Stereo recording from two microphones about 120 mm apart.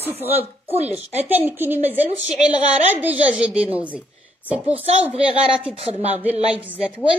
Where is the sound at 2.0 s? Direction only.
65° right (ahead or behind).